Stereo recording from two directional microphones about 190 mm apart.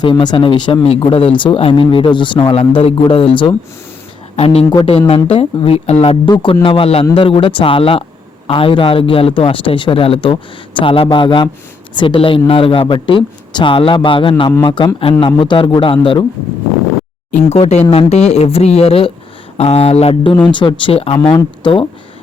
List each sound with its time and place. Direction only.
0.0 s speech: 25° left (ahead or behind)
17.3 s speech: 35° left (ahead or behind)